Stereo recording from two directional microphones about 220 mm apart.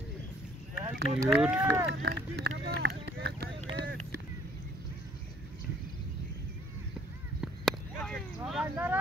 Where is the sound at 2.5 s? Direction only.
55° right (ahead or behind).